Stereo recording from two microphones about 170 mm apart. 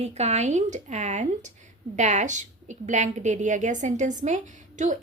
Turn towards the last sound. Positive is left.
turn(degrees=-45)  # may be behind; listen again after turning